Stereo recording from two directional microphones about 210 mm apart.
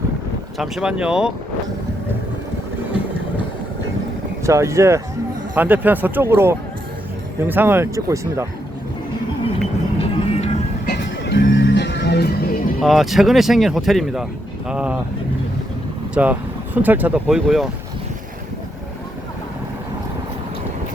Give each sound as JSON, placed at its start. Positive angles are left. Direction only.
{"t": 0.6, "sound": "speech", "side_deg": -5}
{"t": 4.4, "sound": "speech", "side_deg": -15}
{"t": 10.0, "sound": "music", "side_deg": 30}
{"t": 10.9, "sound": "music", "side_deg": 50}
{"t": 12.8, "sound": "speech", "side_deg": 0}
{"t": 16.1, "sound": "speech", "side_deg": -5}